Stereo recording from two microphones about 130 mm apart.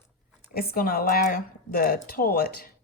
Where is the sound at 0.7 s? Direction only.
90° left.